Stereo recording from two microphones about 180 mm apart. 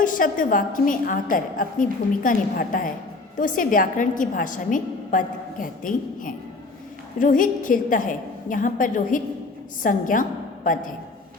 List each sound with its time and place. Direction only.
0.0 s a woman's voice: 50° left (ahead or behind)